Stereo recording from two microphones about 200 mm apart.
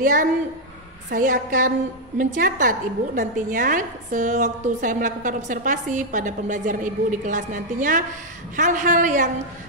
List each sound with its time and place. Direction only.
0.0 s a woman's voice: 40° right (ahead or behind)